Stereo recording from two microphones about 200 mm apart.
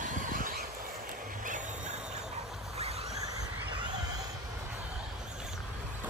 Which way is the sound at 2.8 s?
30° right (ahead or behind).